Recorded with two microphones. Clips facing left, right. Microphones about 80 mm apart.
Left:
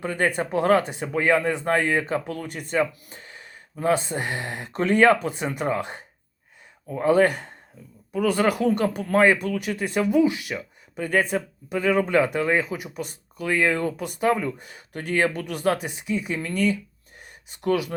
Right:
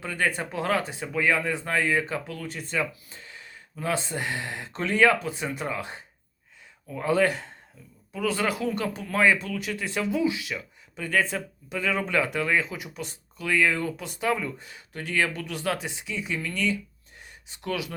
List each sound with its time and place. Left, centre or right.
0.0 s speech: left
0.3 s speech: left
0.8 s speech: left
1.0 s speech: left
7.3 s speech: left
8.1 s speech: left
9.1 s speech: left
12.6 s speech: left
17.2 s a sound: left